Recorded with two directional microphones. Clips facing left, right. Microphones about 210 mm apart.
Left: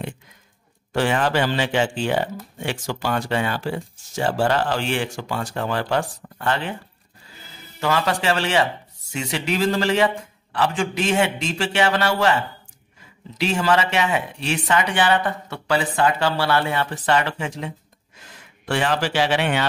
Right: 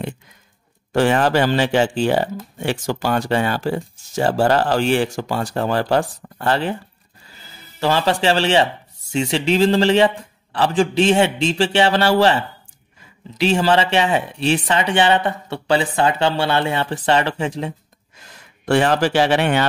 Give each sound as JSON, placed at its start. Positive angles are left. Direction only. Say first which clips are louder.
{"t": 0.9, "sound": "speech", "louder": "right 4 dB", "side_deg": -40}
{"t": 7.8, "sound": "speech", "louder": "right 4 dB", "side_deg": -30}
{"t": 13.4, "sound": "speech", "louder": "right 4 dB", "side_deg": -30}
{"t": 18.7, "sound": "a man's voice", "louder": "right 6 dB", "side_deg": -45}